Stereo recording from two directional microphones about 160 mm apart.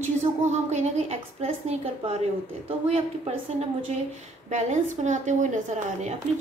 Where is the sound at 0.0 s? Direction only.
45° right (ahead or behind).